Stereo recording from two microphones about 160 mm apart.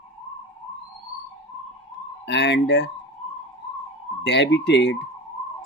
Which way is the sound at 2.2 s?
90° left.